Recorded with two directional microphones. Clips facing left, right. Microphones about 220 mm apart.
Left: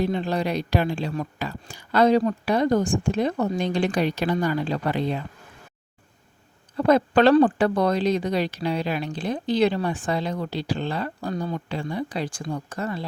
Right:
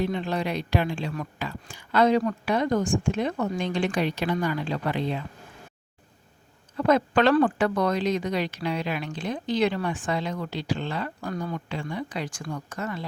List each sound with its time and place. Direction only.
0.0 s speech: 35° left (ahead or behind)
6.7 s speech: 35° left (ahead or behind)